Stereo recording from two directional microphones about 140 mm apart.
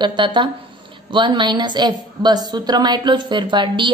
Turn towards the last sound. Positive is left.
turn(degrees=-35)  # may be behind; listen again after turning